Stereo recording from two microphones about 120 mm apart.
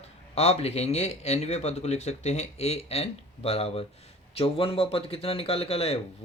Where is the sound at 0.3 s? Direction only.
60° left (ahead or behind).